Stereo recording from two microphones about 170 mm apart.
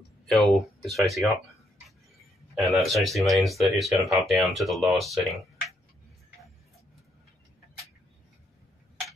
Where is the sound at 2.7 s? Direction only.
Centre (ahead or behind).